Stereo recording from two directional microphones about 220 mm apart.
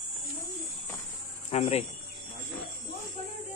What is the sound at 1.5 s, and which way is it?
Speech, 30° left (ahead or behind).